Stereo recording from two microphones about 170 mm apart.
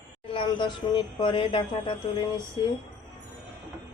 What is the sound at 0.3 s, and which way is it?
Mantra, 25° left (ahead or behind).